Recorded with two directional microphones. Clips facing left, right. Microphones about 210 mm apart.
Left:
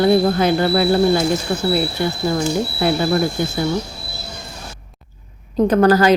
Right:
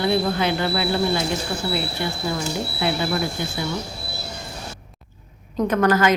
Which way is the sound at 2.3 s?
45° left (ahead or behind).